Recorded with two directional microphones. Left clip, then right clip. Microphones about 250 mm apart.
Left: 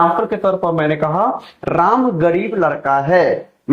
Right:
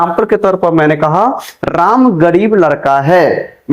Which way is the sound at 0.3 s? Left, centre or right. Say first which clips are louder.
Right 6 dB; right.